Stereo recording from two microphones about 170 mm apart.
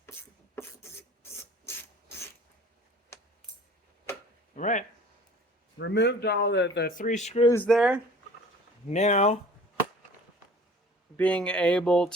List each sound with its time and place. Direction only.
0.0 s a sound: 15° left (ahead or behind)
3.1 s coin: 15° left (ahead or behind)
4.5 s speech: 45° left (ahead or behind)
5.8 s speech: 90° left
6.9 s speech: 50° left (ahead or behind)
7.4 s speech: 15° left (ahead or behind)
7.7 s speech: 5° right (ahead or behind)
8.9 s speech: 40° left (ahead or behind)
11.2 s speech: 5° left (ahead or behind)